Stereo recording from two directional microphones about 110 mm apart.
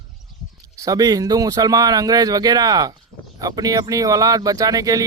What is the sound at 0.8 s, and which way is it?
Speech, 35° right (ahead or behind).